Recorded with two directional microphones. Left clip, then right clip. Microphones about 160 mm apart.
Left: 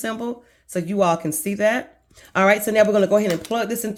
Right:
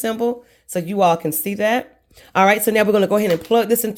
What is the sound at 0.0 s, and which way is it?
Speech, 20° right (ahead or behind).